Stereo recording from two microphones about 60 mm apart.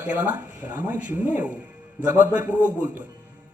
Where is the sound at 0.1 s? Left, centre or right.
Right.